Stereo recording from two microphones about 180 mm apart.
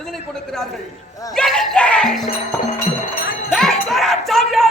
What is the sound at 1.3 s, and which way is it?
Speech, centre (ahead or behind).